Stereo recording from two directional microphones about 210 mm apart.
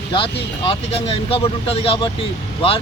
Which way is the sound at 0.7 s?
25° left (ahead or behind).